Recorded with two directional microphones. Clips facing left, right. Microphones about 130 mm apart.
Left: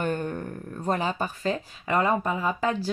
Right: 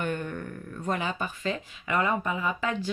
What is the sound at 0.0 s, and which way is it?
Speech, 35° left (ahead or behind).